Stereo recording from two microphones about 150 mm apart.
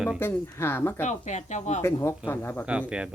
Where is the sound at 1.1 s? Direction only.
50° left (ahead or behind).